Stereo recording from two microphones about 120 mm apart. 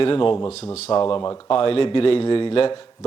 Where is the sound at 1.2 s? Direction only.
30° left (ahead or behind).